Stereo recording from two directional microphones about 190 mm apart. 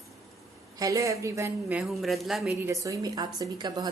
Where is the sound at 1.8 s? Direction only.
Centre (ahead or behind).